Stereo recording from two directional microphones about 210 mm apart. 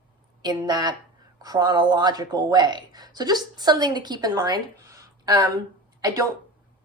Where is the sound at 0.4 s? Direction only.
20° right (ahead or behind).